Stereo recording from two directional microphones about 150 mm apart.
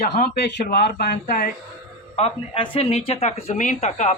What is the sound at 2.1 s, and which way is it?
A man's voice, 40° left (ahead or behind).